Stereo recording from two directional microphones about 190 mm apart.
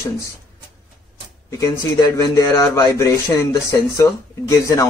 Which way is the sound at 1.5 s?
15° left (ahead or behind).